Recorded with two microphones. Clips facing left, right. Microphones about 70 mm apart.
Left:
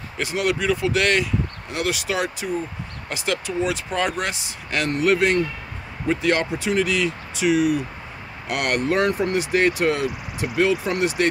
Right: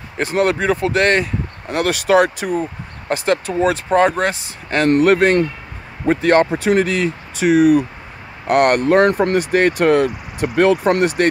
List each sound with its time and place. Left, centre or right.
0.2 s speech: right
3.1 s speech: right
4.8 s speech: right